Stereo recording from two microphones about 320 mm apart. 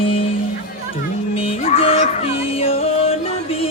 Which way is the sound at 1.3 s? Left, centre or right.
Centre.